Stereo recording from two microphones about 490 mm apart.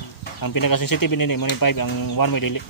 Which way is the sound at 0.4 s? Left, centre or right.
Left.